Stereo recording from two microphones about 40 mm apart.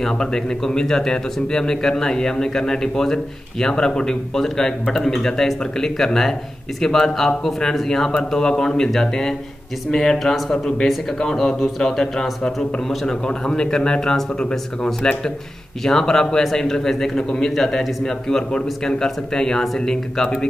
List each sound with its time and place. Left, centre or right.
0.0 s a man's voice: centre
17.6 s a man's voice: centre